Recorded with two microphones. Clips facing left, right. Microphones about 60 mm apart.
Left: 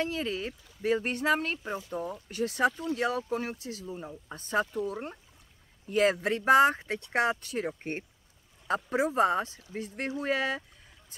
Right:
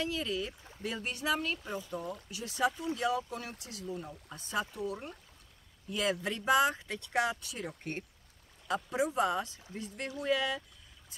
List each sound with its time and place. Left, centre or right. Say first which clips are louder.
0.0 s speech: left 3 dB; left
1.6 s speech: left 3 dB; left
2.2 s speech: left 5 dB; left